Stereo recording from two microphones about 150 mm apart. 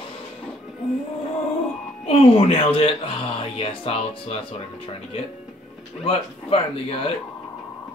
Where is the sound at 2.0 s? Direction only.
40° left (ahead or behind).